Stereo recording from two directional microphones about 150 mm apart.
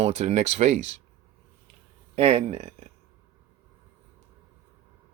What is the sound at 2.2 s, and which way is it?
Speech, 45° right (ahead or behind).